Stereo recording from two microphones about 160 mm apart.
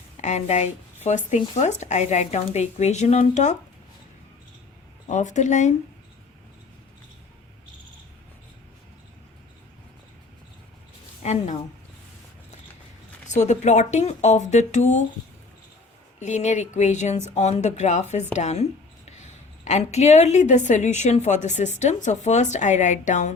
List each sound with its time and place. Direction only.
0.2 s speech: 45° left (ahead or behind)
5.0 s speech: 50° left (ahead or behind)
11.2 s a woman's voice: 45° left (ahead or behind)
13.2 s speech: 45° left (ahead or behind)
16.2 s speech: 45° left (ahead or behind)